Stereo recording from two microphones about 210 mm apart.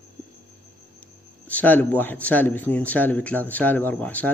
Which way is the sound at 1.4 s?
10° left (ahead or behind).